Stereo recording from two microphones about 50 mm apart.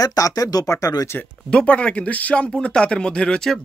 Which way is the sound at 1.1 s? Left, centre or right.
Left.